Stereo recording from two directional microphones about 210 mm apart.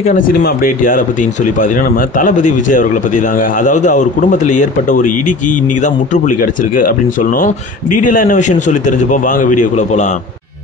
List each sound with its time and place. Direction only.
0.4 s speech: 45° left (ahead or behind)